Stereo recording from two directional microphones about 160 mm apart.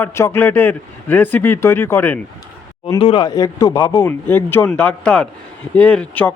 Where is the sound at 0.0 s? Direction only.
15° left (ahead or behind).